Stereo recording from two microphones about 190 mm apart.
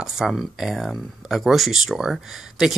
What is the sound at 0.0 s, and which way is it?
Speech, centre (ahead or behind).